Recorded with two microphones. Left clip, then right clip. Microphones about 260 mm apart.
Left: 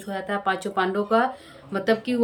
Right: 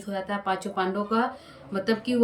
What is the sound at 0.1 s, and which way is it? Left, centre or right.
Speech, centre.